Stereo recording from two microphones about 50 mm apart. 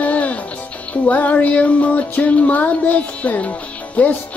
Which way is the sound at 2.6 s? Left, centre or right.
Left.